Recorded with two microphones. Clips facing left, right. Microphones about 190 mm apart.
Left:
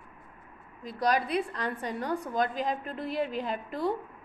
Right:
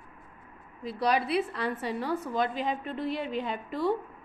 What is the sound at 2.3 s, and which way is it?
Speech, 45° left (ahead or behind).